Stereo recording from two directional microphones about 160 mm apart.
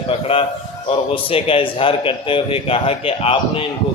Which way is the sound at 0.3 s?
35° left (ahead or behind).